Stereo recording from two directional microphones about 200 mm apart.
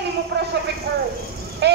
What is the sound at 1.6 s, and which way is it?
Speech, 55° right (ahead or behind).